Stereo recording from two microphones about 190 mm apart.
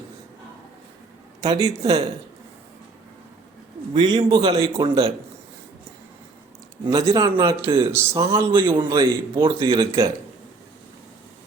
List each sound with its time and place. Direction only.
1.4 s speech: 20° right (ahead or behind)
3.9 s speech: 25° right (ahead or behind)
6.8 s speech: 20° right (ahead or behind)